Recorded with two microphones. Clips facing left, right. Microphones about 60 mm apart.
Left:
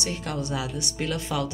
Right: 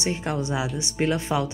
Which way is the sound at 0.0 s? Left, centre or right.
Right.